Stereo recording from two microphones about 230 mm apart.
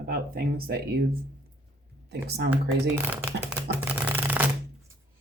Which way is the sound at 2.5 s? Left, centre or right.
Centre.